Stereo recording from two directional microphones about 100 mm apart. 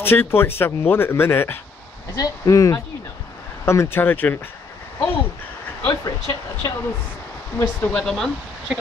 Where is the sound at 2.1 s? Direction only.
35° left (ahead or behind); by 4.3 s 20° left (ahead or behind).